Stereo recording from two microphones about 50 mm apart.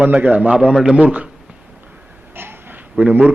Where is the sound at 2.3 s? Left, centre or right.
Right.